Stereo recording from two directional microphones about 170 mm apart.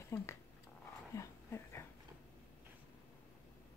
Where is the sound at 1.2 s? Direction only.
15° left (ahead or behind).